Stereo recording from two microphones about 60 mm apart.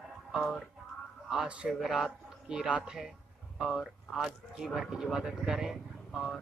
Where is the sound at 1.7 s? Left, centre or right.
Centre.